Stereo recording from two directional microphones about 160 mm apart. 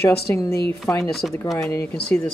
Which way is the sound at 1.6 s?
20° left (ahead or behind).